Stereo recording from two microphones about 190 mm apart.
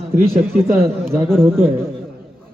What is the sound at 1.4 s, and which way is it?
Speech, 10° right (ahead or behind).